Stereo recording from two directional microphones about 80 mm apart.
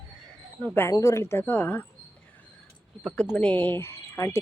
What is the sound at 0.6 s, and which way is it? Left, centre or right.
Speech, left.